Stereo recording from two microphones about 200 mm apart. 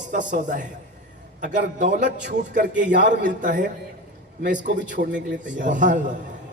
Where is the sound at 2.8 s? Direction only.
60° right (ahead or behind).